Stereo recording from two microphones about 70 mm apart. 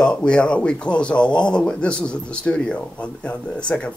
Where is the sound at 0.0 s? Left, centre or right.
Centre.